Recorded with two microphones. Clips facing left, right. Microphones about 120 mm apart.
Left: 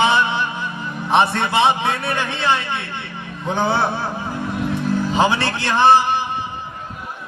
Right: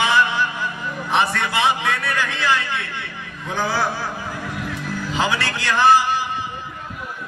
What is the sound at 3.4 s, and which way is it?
Speech, 25° left (ahead or behind).